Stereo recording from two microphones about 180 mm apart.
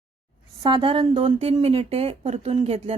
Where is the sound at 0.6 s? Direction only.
30° right (ahead or behind).